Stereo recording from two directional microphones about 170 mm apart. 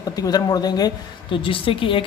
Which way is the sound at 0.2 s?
20° left (ahead or behind).